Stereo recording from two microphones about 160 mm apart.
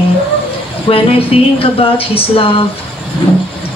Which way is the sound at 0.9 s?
35° left (ahead or behind).